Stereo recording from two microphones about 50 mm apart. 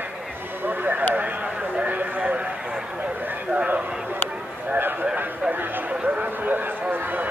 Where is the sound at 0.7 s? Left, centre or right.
Right.